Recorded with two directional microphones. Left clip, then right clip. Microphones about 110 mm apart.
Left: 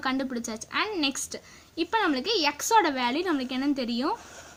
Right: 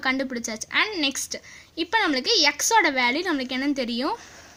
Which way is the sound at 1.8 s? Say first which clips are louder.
Right 3 dB; 30° right (ahead or behind).